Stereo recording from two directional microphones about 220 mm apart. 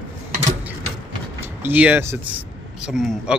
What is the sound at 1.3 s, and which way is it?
Speech, 10° right (ahead or behind).